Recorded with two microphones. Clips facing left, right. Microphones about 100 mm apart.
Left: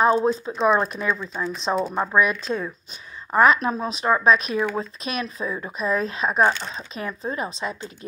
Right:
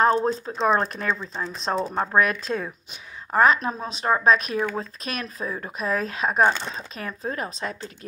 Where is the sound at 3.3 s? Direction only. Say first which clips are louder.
Left 2 dB; 35° right (ahead or behind).